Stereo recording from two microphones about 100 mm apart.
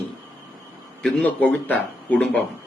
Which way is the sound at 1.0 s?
15° left (ahead or behind).